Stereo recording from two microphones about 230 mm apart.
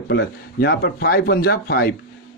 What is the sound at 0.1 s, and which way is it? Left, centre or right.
A man's voice, left.